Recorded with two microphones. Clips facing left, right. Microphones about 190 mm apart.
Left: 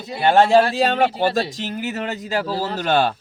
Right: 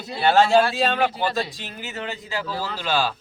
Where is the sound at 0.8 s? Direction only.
40° left (ahead or behind).